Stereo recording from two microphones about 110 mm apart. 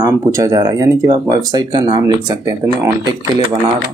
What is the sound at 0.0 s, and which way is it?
Speech, 30° right (ahead or behind).